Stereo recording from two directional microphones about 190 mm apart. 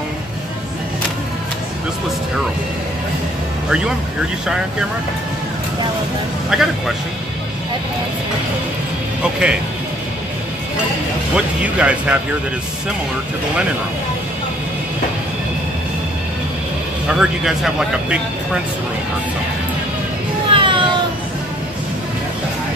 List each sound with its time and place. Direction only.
6.5 s speech: 5° right (ahead or behind)
9.2 s speech: 5° right (ahead or behind)
11.3 s speech: 5° right (ahead or behind)
17.1 s speech: 5° right (ahead or behind)
20.5 s a sound: 25° right (ahead or behind)